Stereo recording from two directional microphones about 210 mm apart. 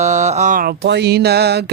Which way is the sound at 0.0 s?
35° right (ahead or behind).